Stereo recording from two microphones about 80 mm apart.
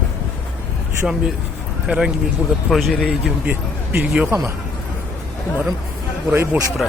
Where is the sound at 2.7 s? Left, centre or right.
Centre.